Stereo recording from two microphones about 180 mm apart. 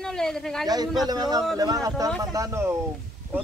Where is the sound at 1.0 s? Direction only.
20° right (ahead or behind).